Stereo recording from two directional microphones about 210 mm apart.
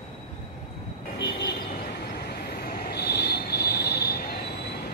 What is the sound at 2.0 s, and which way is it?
Train, 50° left (ahead or behind).